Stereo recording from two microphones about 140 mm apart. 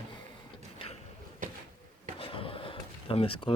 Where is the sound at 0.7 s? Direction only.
45° left (ahead or behind).